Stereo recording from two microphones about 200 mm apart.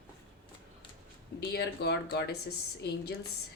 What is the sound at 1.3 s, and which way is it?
Speech, 55° left (ahead or behind).